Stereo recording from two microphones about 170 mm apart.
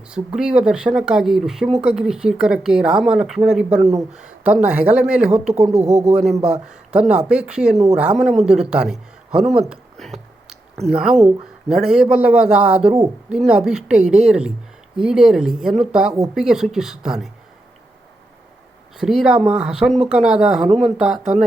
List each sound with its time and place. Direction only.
0.1 s speech: 5° right (ahead or behind)
5.7 s speech: 40° right (ahead or behind)
6.4 s a man's voice: 5° right (ahead or behind)
9.6 s a sound: centre (ahead or behind)
10.8 s speech: 5° right (ahead or behind)
18.9 s speech: 5° right (ahead or behind)